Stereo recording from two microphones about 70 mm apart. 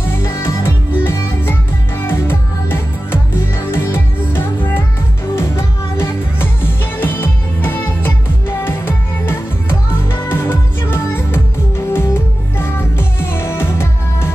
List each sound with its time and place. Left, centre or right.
0.0 s music: left
5.3 s music: left